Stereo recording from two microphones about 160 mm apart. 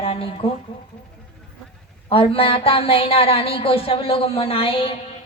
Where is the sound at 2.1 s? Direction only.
35° left (ahead or behind).